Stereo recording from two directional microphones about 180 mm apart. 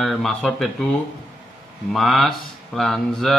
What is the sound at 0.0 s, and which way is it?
Speech, centre (ahead or behind).